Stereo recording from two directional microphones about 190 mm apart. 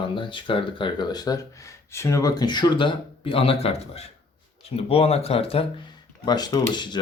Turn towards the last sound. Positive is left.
turn(degrees=25)  # may be behind; listen again after turning